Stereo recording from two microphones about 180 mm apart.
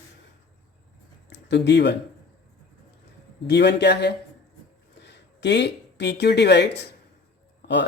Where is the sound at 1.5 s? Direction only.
75° left (ahead or behind).